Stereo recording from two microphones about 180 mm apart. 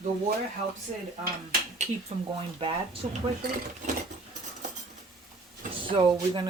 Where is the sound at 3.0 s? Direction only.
40° right (ahead or behind).